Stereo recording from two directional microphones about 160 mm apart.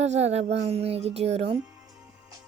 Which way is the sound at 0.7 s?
40° right (ahead or behind).